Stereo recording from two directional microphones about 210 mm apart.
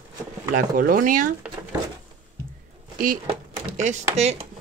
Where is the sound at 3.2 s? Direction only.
35° right (ahead or behind).